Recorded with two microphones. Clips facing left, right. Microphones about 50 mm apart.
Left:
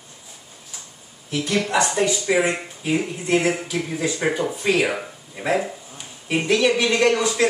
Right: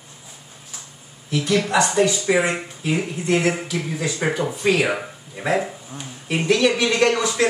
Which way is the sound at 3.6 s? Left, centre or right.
Centre.